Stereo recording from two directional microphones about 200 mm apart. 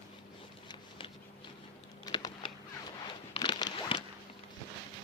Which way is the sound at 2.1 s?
25° left (ahead or behind).